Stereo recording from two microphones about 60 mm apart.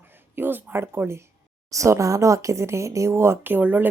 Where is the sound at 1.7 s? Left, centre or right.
Right.